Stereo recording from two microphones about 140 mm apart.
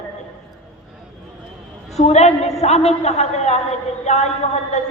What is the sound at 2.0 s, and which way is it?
A woman's voice, 50° left (ahead or behind).